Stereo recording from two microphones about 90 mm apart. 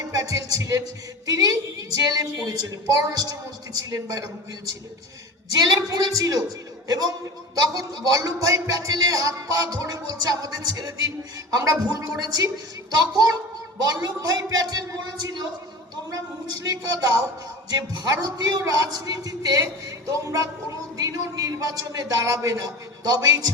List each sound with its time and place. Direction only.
0.1 s music: 40° right (ahead or behind)
1.3 s a man's voice: 40° right (ahead or behind)